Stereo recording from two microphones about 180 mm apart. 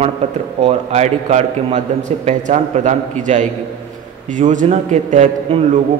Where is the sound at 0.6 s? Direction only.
35° right (ahead or behind).